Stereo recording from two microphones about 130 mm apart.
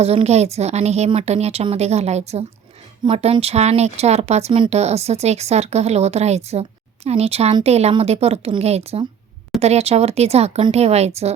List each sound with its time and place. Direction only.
0.0 s a woman's voice: 50° right (ahead or behind)